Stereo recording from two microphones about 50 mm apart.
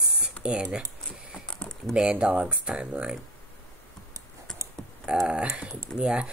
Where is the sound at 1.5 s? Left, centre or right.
Centre.